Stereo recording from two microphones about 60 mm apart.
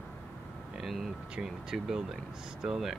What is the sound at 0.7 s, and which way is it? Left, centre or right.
Speech, centre.